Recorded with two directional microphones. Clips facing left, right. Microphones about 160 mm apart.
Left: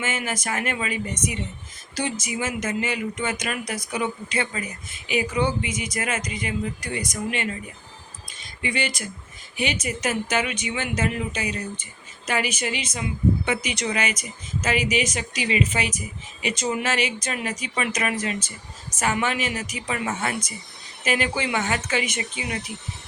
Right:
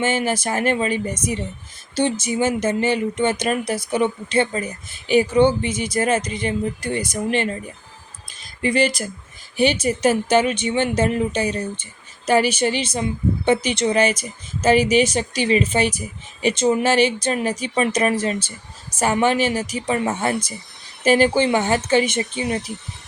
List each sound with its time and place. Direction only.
0.0 s speech: 30° right (ahead or behind)